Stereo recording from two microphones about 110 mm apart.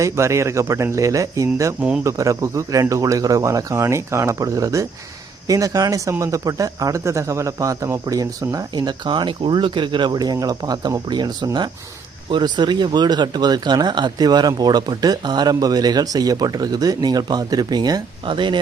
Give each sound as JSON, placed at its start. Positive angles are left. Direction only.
{"t": 0.0, "sound": "speech", "side_deg": -25}